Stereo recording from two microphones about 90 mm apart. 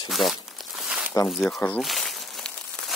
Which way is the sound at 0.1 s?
Centre (ahead or behind).